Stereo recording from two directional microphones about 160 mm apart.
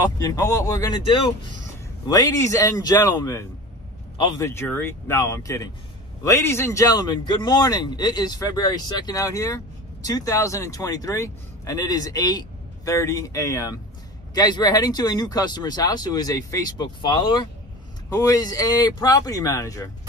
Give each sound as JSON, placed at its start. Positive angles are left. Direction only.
{"t": 0.2, "sound": "speech", "side_deg": 20}